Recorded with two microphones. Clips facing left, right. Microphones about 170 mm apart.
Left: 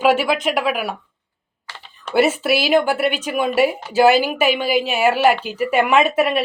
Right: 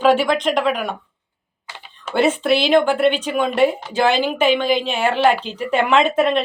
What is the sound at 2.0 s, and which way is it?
A woman's voice, 5° left (ahead or behind).